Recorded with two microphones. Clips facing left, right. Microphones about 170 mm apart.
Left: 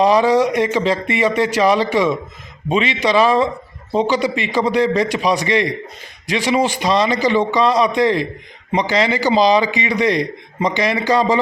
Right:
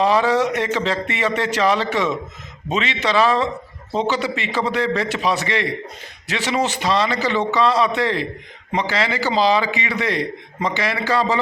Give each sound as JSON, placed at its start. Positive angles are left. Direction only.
{"t": 0.0, "sound": "a man's voice", "side_deg": 15}